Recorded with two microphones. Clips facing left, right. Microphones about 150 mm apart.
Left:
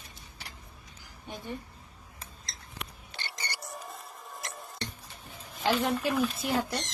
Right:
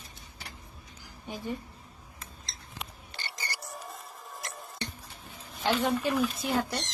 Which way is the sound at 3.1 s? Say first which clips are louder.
Even; centre (ahead or behind).